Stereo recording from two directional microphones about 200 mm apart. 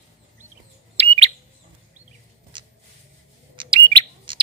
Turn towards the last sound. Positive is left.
turn(degrees=-25)  # may be behind; listen again after turning